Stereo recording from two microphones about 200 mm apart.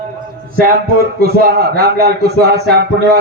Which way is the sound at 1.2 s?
50° right (ahead or behind).